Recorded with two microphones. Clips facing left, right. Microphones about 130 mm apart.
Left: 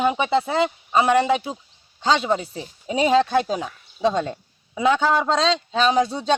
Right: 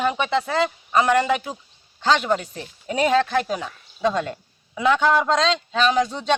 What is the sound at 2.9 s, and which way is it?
Speech, 25° left (ahead or behind).